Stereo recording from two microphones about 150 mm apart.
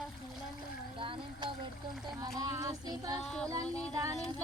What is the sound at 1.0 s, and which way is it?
Speech, 35° right (ahead or behind).